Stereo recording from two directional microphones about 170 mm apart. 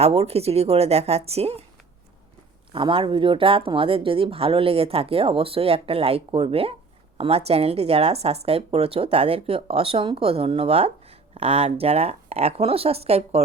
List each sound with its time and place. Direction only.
0.0 s speech: 35° right (ahead or behind)
2.7 s speech: 30° right (ahead or behind)